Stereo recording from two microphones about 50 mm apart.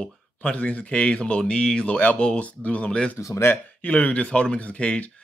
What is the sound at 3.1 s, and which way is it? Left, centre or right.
Speech, left.